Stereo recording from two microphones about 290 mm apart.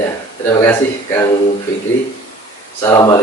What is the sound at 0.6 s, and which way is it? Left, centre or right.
Speech, centre.